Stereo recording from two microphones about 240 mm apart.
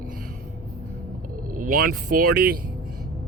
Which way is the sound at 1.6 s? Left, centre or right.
Right.